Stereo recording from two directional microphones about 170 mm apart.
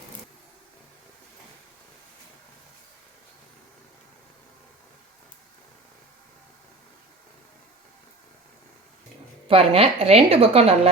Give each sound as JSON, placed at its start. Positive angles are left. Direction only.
{"t": 9.5, "sound": "a woman's voice", "side_deg": -35}